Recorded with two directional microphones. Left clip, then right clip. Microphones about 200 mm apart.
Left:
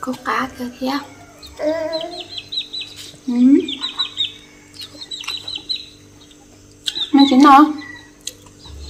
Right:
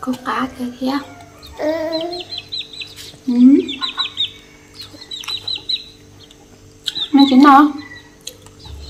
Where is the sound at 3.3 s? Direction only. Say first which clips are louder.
Right 2 dB; 5° left (ahead or behind).